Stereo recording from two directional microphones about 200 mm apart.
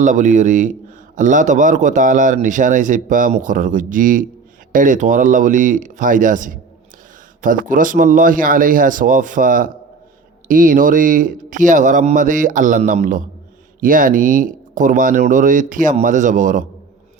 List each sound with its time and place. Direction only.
0.0 s a man's voice: 40° right (ahead or behind)